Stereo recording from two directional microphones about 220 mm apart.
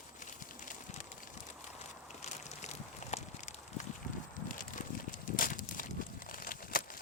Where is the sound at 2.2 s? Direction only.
30° left (ahead or behind).